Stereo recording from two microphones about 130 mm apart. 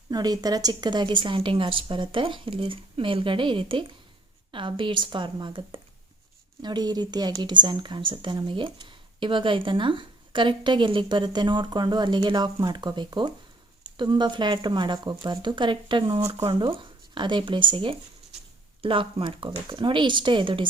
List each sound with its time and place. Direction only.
0.1 s speech: 30° right (ahead or behind)